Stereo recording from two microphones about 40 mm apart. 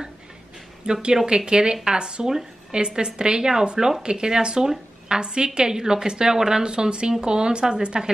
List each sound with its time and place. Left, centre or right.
1.0 s a woman's voice: right